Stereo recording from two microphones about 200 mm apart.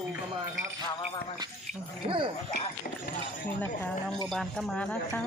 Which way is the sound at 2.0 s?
25° right (ahead or behind).